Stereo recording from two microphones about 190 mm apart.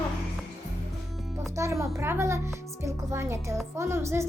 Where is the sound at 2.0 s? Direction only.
15° right (ahead or behind).